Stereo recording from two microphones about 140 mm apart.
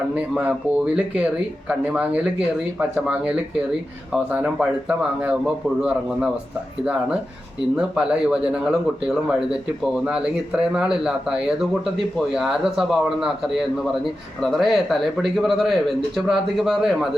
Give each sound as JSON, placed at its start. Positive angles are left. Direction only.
{"t": 0.1, "sound": "speech", "side_deg": -10}
{"t": 7.8, "sound": "speech", "side_deg": -5}
{"t": 10.1, "sound": "speech", "side_deg": -5}